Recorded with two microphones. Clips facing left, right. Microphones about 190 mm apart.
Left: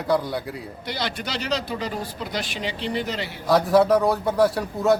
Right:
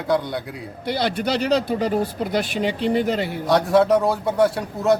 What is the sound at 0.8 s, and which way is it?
Speech, 55° right (ahead or behind).